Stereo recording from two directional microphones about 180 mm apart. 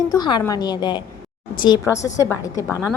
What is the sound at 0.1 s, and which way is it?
A woman's voice, 25° left (ahead or behind).